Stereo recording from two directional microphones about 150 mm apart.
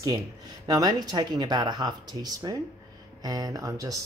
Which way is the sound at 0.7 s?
25° right (ahead or behind).